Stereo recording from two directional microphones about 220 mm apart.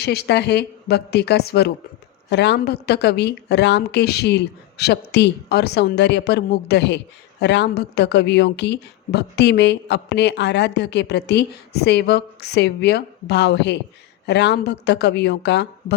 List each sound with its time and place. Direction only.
0.0 s a woman's voice: 45° left (ahead or behind)